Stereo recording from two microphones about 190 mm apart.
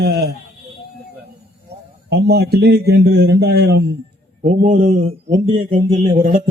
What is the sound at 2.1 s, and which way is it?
A man's voice, 60° right (ahead or behind).